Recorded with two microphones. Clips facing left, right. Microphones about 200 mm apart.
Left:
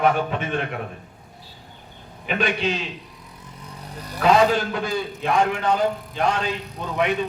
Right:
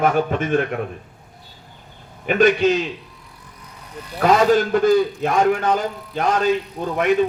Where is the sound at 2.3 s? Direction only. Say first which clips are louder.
Right 8 dB; 45° right (ahead or behind).